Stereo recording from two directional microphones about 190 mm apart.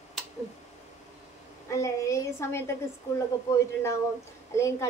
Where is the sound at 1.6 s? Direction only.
15° left (ahead or behind).